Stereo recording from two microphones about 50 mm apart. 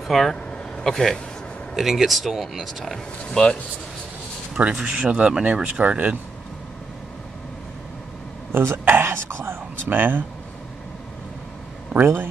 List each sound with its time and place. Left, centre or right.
0.1 s speech: centre
3.3 s speech: centre
4.7 s speech: centre
8.5 s speech: right
12.0 s speech: right